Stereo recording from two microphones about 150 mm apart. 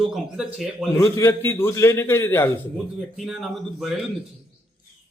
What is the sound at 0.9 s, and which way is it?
A man's voice, 20° left (ahead or behind).